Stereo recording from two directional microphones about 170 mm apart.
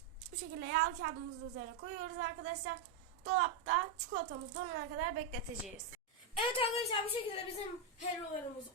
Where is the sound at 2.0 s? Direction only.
50° right (ahead or behind).